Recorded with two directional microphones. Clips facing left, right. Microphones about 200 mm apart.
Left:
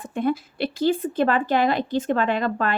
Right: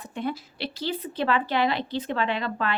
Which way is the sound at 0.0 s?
50° left (ahead or behind).